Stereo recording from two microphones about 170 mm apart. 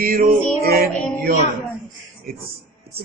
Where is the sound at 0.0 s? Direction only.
60° right (ahead or behind).